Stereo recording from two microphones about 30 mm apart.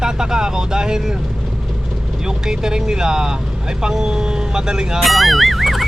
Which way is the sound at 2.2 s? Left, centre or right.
Right.